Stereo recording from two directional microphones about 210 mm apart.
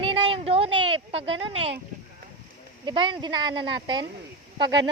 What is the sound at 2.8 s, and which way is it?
Speech, 25° right (ahead or behind).